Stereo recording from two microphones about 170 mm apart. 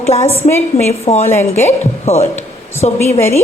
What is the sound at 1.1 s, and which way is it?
A woman's voice, 35° left (ahead or behind).